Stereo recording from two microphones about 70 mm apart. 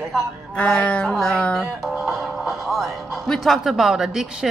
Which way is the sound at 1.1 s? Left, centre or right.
Centre.